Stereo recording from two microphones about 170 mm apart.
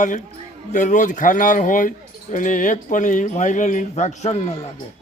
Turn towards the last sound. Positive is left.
turn(degrees=40)  # may be behind; listen again after turning